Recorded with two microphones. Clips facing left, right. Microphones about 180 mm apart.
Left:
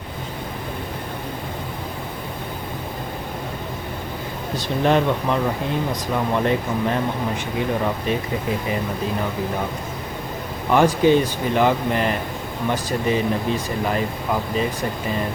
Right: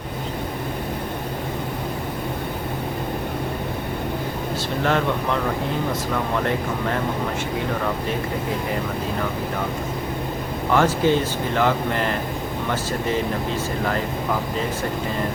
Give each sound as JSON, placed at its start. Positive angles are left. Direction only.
{"t": 4.8, "sound": "speech", "side_deg": 20}
{"t": 10.7, "sound": "speech", "side_deg": 15}